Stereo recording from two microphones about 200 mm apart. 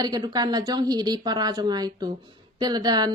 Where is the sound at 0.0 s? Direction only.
20° right (ahead or behind).